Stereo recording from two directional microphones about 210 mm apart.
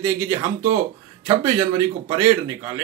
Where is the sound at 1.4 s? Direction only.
20° right (ahead or behind).